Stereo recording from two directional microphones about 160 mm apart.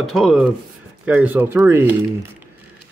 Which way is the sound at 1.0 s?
10° right (ahead or behind).